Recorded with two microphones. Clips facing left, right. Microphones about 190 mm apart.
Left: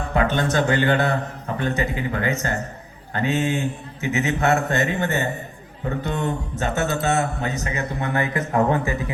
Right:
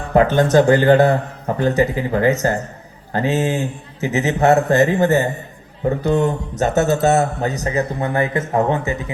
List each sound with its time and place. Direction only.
0.1 s a man's voice: 40° right (ahead or behind); by 9.0 s 20° right (ahead or behind)